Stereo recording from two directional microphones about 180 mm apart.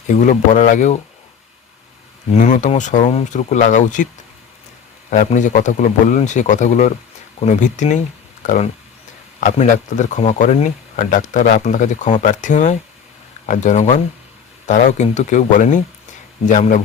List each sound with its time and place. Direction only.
0.1 s speech: 45° left (ahead or behind)
2.3 s speech: 45° left (ahead or behind)
5.1 s speech: 40° left (ahead or behind)